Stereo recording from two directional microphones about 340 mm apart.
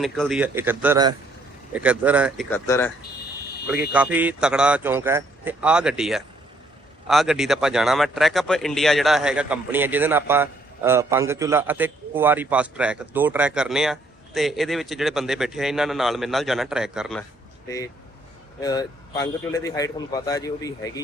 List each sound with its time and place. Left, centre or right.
0.0 s speech: centre
3.9 s speech: centre
18.6 s a man's voice: centre